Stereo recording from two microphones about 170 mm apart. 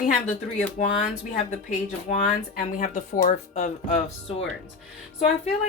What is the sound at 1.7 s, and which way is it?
Speech, 50° left (ahead or behind).